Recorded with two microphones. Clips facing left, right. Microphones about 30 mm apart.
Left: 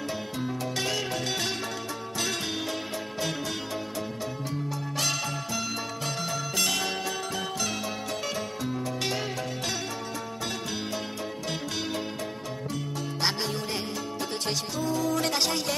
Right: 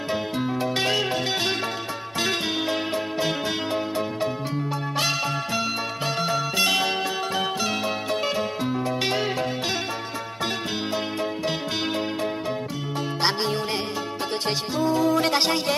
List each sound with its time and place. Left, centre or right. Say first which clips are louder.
0.1 s music: right 11 dB; right
13.2 s music: right 5 dB; right
14.8 s music: right 7 dB; right